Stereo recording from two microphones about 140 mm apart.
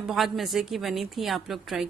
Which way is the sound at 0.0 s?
Centre (ahead or behind).